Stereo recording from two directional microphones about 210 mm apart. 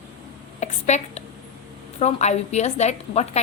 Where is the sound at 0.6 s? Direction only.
35° left (ahead or behind).